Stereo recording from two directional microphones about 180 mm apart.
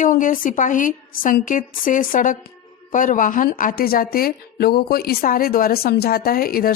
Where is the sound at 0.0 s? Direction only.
45° left (ahead or behind).